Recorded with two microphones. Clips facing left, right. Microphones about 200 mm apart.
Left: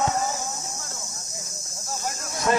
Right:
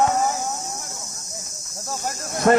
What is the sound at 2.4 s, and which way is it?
Speech, 55° right (ahead or behind).